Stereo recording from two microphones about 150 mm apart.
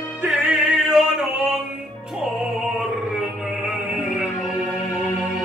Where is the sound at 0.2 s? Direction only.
5° right (ahead or behind).